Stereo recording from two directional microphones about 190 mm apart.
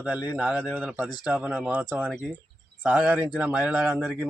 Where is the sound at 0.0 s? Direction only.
10° right (ahead or behind).